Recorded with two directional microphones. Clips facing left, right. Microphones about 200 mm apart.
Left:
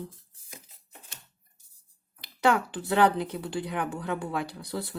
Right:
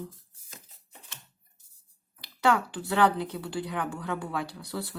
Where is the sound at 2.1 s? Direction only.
20° left (ahead or behind).